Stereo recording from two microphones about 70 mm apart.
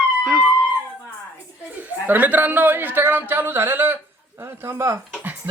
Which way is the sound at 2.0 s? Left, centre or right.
Right.